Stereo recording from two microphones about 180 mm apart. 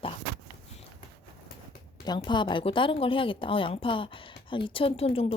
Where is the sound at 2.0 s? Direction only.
25° left (ahead or behind).